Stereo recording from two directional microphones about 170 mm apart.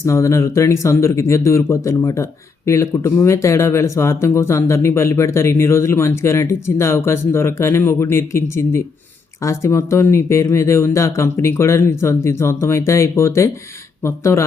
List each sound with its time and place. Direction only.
0.0 s speech: 15° left (ahead or behind)